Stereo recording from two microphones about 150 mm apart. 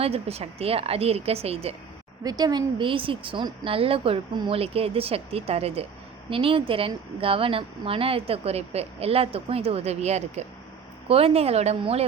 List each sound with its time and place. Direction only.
0.0 s speech: 45° right (ahead or behind)
2.2 s speech: 25° right (ahead or behind)